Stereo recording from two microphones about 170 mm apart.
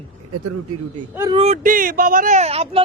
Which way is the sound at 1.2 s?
35° right (ahead or behind).